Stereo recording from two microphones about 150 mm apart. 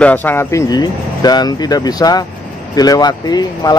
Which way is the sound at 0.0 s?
10° left (ahead or behind).